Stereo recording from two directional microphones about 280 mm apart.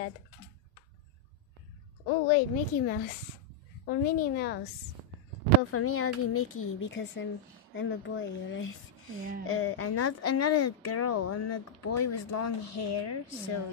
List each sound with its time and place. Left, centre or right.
2.2 s a woman's voice: left
5.7 s a woman's voice: left